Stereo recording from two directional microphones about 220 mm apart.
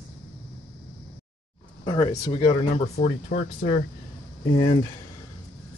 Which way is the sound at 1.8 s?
20° left (ahead or behind).